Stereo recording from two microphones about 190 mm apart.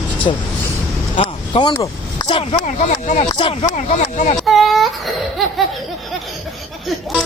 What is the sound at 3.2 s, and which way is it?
Speech, 25° left (ahead or behind).